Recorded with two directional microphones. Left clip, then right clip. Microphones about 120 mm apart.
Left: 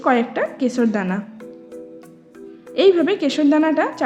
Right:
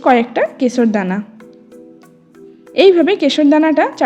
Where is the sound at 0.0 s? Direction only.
40° right (ahead or behind).